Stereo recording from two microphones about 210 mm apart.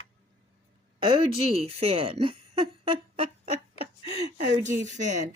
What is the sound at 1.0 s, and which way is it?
Speech, 30° right (ahead or behind).